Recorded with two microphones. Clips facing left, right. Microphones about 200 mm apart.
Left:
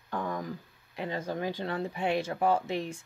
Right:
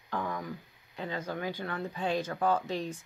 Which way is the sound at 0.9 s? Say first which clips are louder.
Left 2 dB; 30° left (ahead or behind).